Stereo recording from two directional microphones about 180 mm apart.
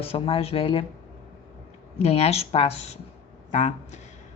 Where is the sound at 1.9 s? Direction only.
35° left (ahead or behind).